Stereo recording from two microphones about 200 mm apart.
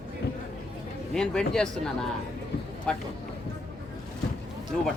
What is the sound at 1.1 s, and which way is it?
Speech, 5° left (ahead or behind).